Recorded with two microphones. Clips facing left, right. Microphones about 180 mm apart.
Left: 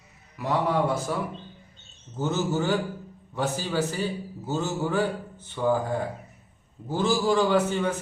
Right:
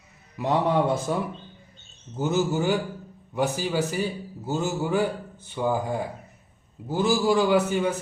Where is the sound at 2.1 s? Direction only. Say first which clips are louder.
Right 2 dB; 10° right (ahead or behind).